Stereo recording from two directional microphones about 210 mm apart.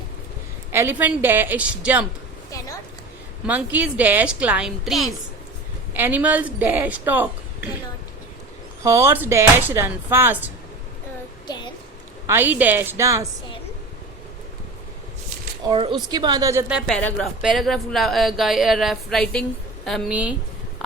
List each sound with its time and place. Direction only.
0.7 s a woman's voice: 10° right (ahead or behind)
3.4 s a woman's voice: 5° right (ahead or behind)
8.8 s a woman's voice: 15° right (ahead or behind)
11.4 s a sound: 20° left (ahead or behind)
12.3 s a woman's voice: 10° right (ahead or behind)
15.6 s a woman's voice: 25° right (ahead or behind); by 16.9 s 5° right (ahead or behind)
16.9 s a woman's voice: 5° left (ahead or behind)